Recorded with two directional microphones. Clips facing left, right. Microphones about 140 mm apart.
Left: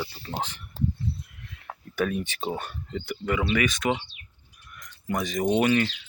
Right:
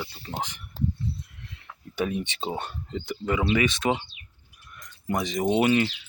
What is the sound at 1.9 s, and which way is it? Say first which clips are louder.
Speech: left 1 dB; 20° right (ahead or behind).